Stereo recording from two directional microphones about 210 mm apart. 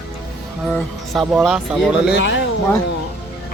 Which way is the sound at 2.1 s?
60° left (ahead or behind).